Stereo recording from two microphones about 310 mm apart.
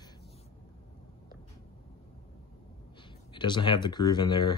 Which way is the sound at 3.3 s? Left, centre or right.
Centre.